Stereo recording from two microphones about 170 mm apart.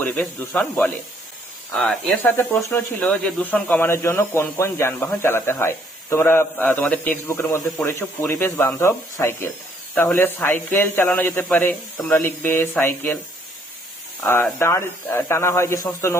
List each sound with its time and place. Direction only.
0.0 s speech: 10° left (ahead or behind)
14.6 s speech: 15° left (ahead or behind)